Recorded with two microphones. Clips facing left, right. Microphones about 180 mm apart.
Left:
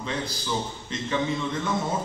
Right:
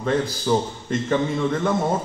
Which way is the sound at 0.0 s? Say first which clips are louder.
Right 9 dB; 50° right (ahead or behind).